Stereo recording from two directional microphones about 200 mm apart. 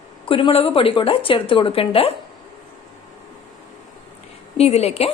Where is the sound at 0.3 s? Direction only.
25° left (ahead or behind).